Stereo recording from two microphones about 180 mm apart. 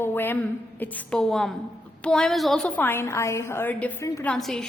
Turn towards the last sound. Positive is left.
turn(degrees=5)  # may be behind; listen again after turning